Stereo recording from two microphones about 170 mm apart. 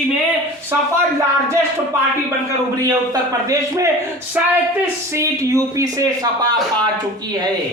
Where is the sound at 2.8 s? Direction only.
20° right (ahead or behind).